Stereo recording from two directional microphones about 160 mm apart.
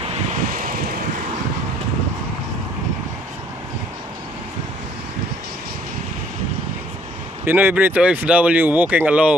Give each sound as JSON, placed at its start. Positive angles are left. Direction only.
{"t": 0.5, "sound": "vehicle", "side_deg": -60}
{"t": 7.4, "sound": "speech", "side_deg": -10}